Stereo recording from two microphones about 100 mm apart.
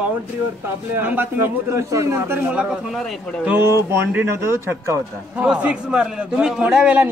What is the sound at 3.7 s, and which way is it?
A man's voice, 30° right (ahead or behind).